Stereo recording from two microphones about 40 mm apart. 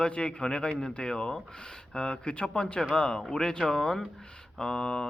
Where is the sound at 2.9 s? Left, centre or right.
Centre.